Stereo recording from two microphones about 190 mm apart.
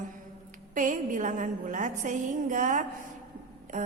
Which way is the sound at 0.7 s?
45° right (ahead or behind).